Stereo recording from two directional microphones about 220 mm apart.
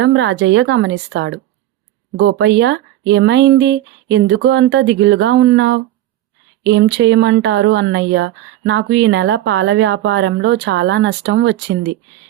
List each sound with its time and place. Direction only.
0.0 s a woman's voice: 55° right (ahead or behind)